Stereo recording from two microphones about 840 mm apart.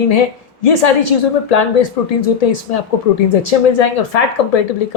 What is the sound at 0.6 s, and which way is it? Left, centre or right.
A woman's voice, left.